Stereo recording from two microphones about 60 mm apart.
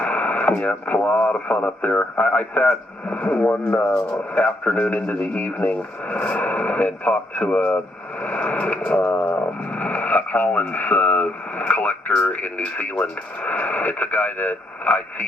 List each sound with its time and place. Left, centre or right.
0.0 s radio: left
0.6 s speech: left